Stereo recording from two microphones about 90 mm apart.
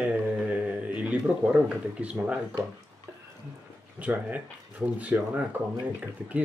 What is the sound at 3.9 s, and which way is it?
Speech, 15° right (ahead or behind).